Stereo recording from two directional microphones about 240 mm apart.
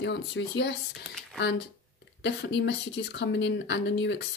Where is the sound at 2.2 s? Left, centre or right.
Left.